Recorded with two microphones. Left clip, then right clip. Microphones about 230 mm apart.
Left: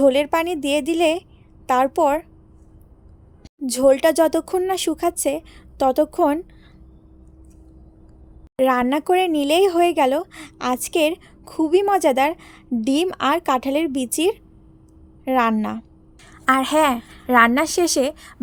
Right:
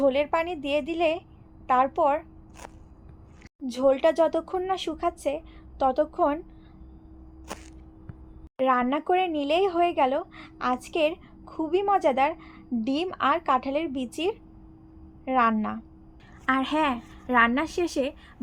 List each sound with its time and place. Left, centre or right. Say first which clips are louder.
0.0 s speech: left 7 dB; left
3.7 s speech: left 6 dB; left
8.5 s a woman's voice: left 5 dB; left